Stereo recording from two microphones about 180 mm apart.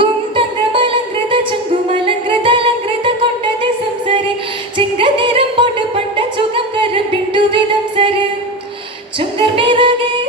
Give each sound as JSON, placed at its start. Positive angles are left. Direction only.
{"t": 0.0, "sound": "music", "side_deg": -30}
{"t": 4.8, "sound": "music", "side_deg": -30}
{"t": 6.9, "sound": "music", "side_deg": -30}
{"t": 9.1, "sound": "music", "side_deg": -30}